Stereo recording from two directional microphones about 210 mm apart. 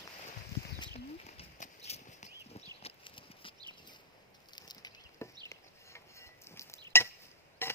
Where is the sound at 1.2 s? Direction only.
30° left (ahead or behind).